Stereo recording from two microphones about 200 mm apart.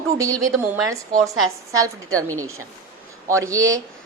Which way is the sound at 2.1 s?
90° right.